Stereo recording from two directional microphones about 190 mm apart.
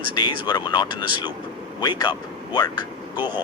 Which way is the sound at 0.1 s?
20° left (ahead or behind).